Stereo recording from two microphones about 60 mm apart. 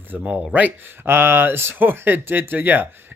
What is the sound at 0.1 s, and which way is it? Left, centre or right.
Speech, right.